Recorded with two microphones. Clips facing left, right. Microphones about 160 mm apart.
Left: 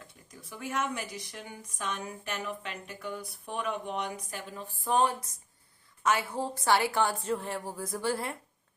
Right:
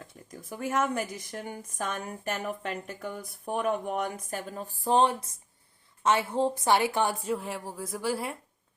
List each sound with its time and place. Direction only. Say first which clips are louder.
0.3 s a woman's voice: right 6 dB; 45° right (ahead or behind); by 8.4 s 10° right (ahead or behind)